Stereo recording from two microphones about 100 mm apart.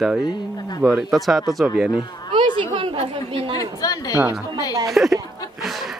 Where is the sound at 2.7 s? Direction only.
65° right (ahead or behind); by 3.4 s 80° right.